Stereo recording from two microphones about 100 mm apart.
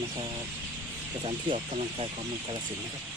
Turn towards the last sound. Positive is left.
turn(degrees=-85)